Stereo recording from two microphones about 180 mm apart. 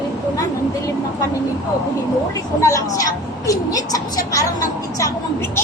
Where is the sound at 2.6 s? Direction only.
15° left (ahead or behind).